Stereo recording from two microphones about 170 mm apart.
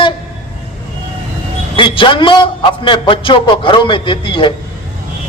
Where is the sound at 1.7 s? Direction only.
30° left (ahead or behind).